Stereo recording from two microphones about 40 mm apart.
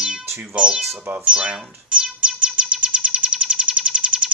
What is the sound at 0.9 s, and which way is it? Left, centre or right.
Speech, right.